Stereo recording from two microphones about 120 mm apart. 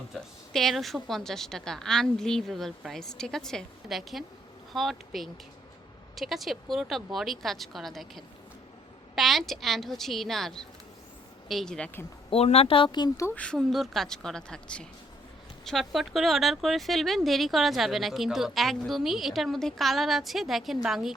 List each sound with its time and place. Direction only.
0.1 s speech: centre (ahead or behind)
12.3 s speech: 60° left (ahead or behind); by 13.1 s 40° left (ahead or behind)
13.3 s speech: 10° left (ahead or behind)